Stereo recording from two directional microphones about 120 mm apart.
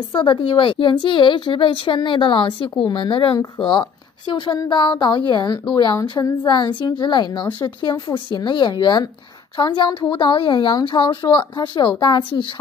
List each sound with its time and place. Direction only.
0.1 s speech: 40° left (ahead or behind)